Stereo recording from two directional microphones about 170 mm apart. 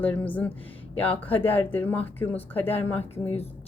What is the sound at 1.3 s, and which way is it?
Speech, 35° left (ahead or behind).